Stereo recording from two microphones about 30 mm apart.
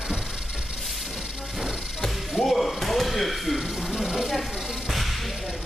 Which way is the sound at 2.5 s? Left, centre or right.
Centre.